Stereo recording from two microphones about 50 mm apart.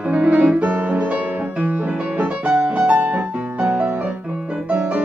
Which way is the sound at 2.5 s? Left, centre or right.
Centre.